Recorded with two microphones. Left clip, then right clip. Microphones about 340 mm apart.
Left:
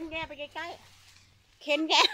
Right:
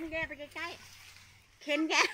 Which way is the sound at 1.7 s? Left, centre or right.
Left.